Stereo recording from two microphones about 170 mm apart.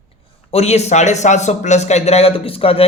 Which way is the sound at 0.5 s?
40° left (ahead or behind).